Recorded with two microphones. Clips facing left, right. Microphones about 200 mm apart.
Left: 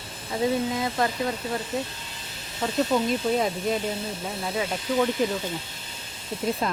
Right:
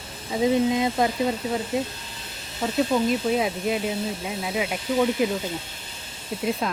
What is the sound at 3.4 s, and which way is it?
Speech, 5° right (ahead or behind).